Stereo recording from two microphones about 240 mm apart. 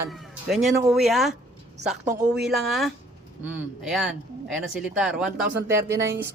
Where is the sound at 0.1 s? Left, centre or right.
Centre.